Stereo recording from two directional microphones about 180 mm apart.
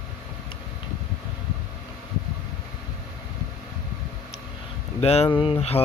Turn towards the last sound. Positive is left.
turn(degrees=30)  # may be behind; listen again after turning